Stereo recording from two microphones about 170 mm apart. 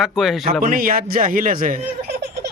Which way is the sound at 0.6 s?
55° right (ahead or behind).